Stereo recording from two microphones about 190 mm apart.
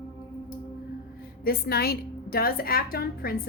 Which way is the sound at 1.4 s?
55° left (ahead or behind).